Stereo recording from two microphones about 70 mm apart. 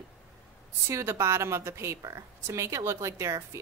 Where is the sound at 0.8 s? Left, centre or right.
Right.